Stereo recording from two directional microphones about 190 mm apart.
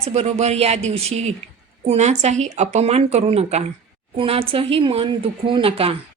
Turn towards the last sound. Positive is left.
turn(degrees=-30)  # may be behind; listen again after turning